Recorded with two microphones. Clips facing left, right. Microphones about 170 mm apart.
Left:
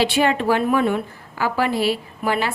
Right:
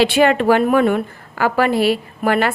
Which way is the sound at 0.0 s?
65° right (ahead or behind).